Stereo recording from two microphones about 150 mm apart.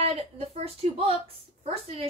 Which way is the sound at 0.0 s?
40° right (ahead or behind).